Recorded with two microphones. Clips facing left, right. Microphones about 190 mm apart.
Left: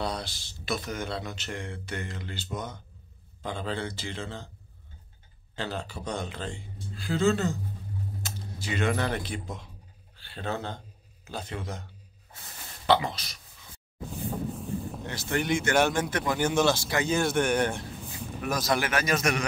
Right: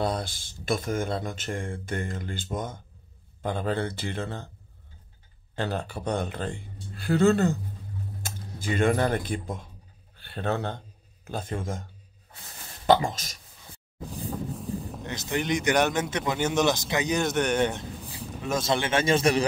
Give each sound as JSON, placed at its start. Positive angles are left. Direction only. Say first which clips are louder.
{"t": 0.0, "sound": "speech", "louder": "right 4 dB", "side_deg": -50}
{"t": 5.6, "sound": "speech", "louder": "right 4 dB", "side_deg": -55}
{"t": 11.2, "sound": "speech", "louder": "right 4 dB", "side_deg": -50}
{"t": 14.0, "sound": "vehicle", "louder": "even", "side_deg": 0}
{"t": 15.0, "sound": "a man's voice", "louder": "even", "side_deg": -15}
{"t": 18.4, "sound": "a man's voice", "louder": "right 1 dB", "side_deg": -25}